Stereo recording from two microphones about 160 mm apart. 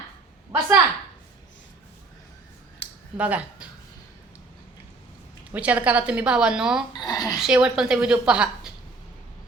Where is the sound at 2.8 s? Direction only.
90° left.